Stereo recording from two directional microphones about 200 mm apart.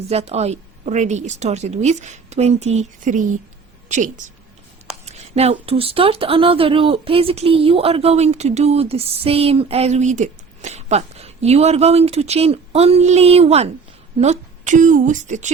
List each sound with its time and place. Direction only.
0.1 s a woman's voice: 30° right (ahead or behind)